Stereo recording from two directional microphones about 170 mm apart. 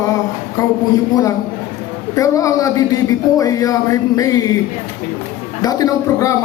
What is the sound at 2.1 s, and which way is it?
A man's voice, 20° left (ahead or behind).